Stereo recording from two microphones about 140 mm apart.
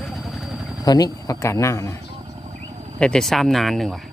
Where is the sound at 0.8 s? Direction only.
25° left (ahead or behind).